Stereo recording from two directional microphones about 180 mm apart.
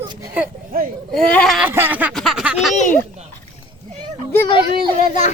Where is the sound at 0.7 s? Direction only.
55° right (ahead or behind).